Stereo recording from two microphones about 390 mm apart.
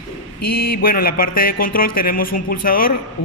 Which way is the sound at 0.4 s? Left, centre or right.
Left.